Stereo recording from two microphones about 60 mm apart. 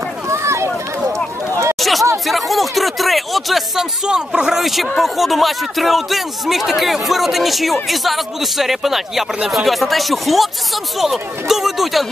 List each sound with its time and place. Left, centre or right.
0.3 s run: right
1.8 s chatter: centre
2.2 s speech: centre